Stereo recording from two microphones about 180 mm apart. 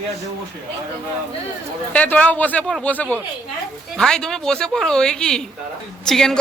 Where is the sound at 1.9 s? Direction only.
10° left (ahead or behind).